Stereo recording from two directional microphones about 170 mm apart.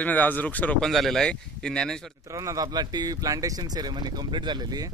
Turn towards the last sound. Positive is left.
turn(degrees=-20)  # may be behind; listen again after turning